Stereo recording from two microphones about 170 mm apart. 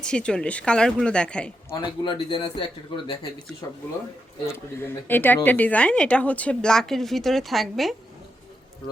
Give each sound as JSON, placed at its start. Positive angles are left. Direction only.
{"t": 0.0, "sound": "a woman's voice", "side_deg": 5}
{"t": 1.7, "sound": "a man's voice", "side_deg": 30}
{"t": 4.4, "sound": "speech", "side_deg": 15}